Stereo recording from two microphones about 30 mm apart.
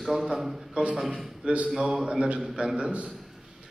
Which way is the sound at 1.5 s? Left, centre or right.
Right.